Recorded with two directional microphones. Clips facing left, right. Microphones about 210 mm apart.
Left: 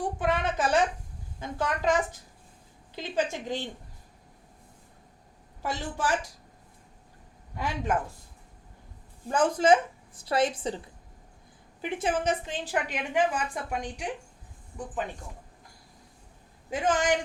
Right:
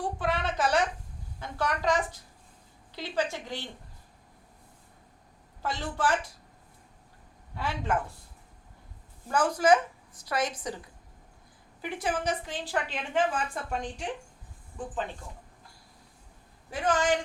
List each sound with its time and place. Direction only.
0.0 s a sound: 20° left (ahead or behind)
0.4 s a woman's voice: 15° left (ahead or behind)
5.6 s a woman's voice: 15° left (ahead or behind)
7.5 s speech: 15° left (ahead or behind)
9.3 s a woman's voice: 25° left (ahead or behind)
11.8 s a woman's voice: 25° left (ahead or behind)
16.6 s a woman's voice: 15° left (ahead or behind)